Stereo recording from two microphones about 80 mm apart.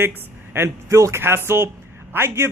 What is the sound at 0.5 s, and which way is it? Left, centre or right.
A man's voice, right.